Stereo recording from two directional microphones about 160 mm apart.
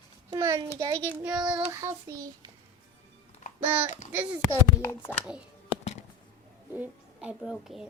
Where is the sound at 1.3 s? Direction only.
5° right (ahead or behind).